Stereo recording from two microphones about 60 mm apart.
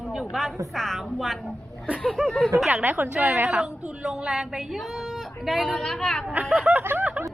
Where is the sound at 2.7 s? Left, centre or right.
Right.